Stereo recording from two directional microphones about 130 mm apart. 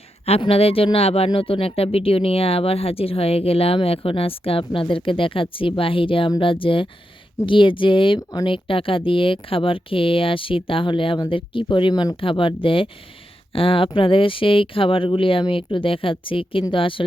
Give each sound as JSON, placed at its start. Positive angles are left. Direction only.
{"t": 0.3, "sound": "speech", "side_deg": 50}